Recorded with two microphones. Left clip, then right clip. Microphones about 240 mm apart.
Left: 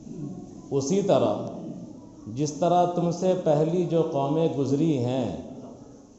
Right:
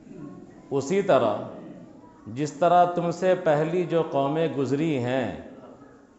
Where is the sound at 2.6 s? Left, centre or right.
Right.